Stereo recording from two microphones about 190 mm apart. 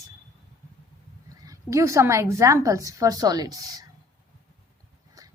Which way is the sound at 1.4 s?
15° right (ahead or behind).